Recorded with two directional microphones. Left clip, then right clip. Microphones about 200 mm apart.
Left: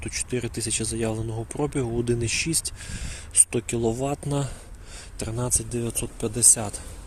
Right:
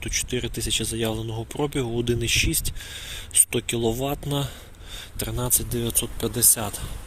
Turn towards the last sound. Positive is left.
turn(degrees=10)  # may be behind; listen again after turning